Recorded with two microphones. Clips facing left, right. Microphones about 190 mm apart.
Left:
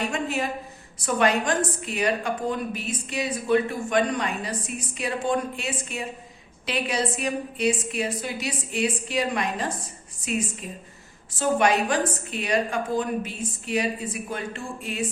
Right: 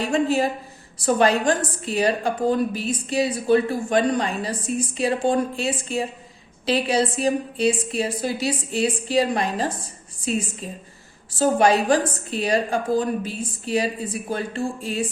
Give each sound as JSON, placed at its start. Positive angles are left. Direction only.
{"t": 0.0, "sound": "a woman's voice", "side_deg": -30}